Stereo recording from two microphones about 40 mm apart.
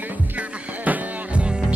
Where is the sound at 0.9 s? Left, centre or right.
Right.